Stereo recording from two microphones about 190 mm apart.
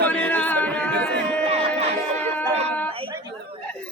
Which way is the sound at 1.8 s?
35° right (ahead or behind).